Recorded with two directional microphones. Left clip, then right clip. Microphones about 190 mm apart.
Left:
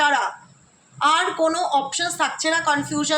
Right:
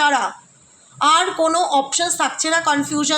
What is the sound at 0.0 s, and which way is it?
A woman's voice, 40° right (ahead or behind).